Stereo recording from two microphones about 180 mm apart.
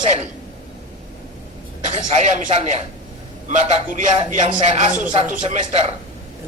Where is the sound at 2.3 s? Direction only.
45° right (ahead or behind).